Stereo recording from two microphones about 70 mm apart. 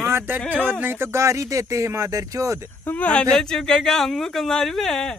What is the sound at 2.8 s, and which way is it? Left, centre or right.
Speech, left.